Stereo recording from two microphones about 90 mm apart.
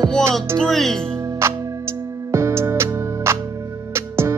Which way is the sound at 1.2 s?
30° right (ahead or behind).